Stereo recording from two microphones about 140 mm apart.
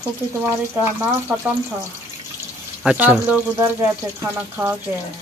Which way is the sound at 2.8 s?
10° right (ahead or behind).